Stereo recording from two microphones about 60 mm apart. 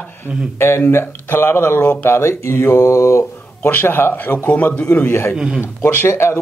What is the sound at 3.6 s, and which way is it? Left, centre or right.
A man's voice, left.